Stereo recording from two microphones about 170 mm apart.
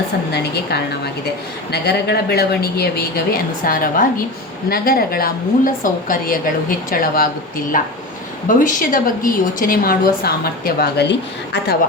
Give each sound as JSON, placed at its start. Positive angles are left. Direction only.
{"t": 0.3, "sound": "a woman's voice", "side_deg": 70}
{"t": 8.4, "sound": "a woman's voice", "side_deg": 50}